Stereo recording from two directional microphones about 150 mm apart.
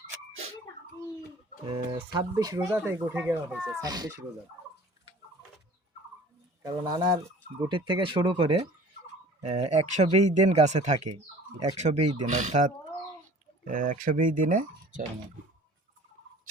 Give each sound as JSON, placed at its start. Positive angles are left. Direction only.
{"t": 1.6, "sound": "speech", "side_deg": -35}
{"t": 2.1, "sound": "speech", "side_deg": -25}
{"t": 3.8, "sound": "speech", "side_deg": -25}
{"t": 6.6, "sound": "speech", "side_deg": -25}
{"t": 9.4, "sound": "speech", "side_deg": -50}